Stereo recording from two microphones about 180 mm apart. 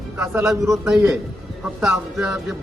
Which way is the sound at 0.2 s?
15° right (ahead or behind).